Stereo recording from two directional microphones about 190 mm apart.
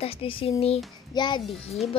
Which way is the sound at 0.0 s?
30° left (ahead or behind).